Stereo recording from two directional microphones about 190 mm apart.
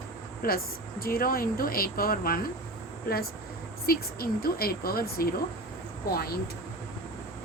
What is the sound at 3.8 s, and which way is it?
Speech, 50° left (ahead or behind).